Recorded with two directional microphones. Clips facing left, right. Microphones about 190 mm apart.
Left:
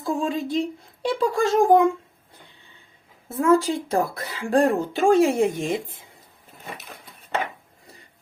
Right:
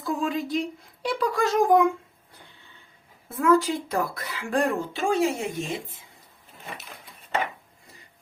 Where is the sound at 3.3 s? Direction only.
30° left (ahead or behind); by 5.4 s 50° left (ahead or behind).